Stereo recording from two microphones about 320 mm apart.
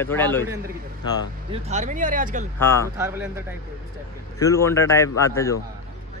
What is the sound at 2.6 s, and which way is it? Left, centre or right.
Speech, centre.